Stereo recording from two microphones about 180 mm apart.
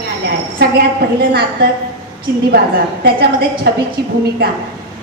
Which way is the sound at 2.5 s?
60° right (ahead or behind).